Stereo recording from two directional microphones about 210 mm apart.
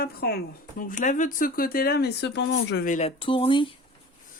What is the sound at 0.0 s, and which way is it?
Speech, 45° left (ahead or behind).